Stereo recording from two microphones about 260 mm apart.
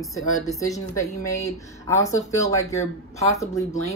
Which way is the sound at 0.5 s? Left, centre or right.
Centre.